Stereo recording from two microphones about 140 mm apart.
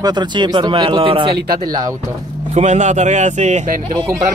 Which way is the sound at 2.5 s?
55° right (ahead or behind).